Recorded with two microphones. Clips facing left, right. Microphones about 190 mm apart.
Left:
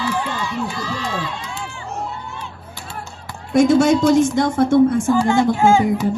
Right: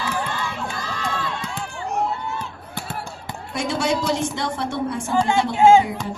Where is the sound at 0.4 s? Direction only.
50° right (ahead or behind).